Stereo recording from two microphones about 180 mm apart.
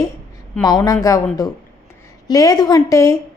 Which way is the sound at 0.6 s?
20° left (ahead or behind).